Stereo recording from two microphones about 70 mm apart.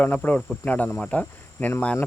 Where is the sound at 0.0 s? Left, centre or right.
Left.